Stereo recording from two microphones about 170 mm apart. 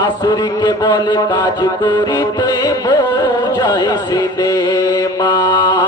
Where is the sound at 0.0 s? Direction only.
25° left (ahead or behind).